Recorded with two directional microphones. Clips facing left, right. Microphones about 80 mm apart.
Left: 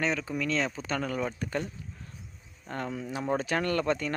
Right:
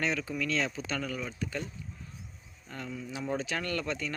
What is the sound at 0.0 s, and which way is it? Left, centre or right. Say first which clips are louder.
Speech: left 2 dB; left.